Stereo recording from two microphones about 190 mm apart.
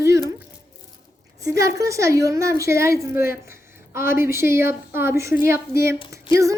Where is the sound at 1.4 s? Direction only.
15° right (ahead or behind).